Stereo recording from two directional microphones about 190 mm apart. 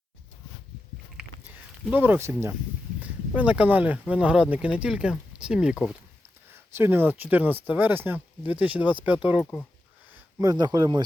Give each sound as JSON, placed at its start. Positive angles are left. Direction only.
{"t": 1.1, "sound": "a sound", "side_deg": -10}
{"t": 3.0, "sound": "speech", "side_deg": -10}
{"t": 10.4, "sound": "speech", "side_deg": -20}